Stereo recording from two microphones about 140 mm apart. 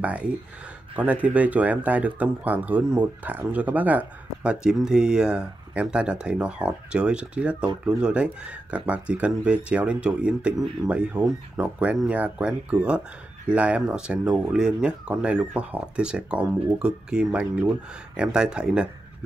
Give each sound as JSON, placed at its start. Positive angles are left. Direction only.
{"t": 0.0, "sound": "speech", "side_deg": -10}